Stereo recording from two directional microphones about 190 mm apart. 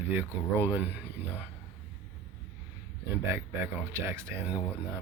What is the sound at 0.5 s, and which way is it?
Speech, 10° right (ahead or behind).